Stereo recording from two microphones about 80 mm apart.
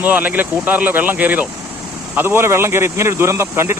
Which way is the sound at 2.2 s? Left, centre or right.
Right.